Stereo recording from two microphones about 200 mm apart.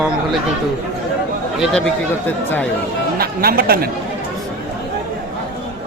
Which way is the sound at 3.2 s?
50° right (ahead or behind).